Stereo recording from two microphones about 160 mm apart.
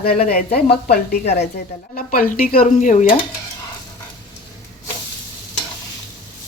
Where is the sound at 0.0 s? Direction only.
65° left (ahead or behind).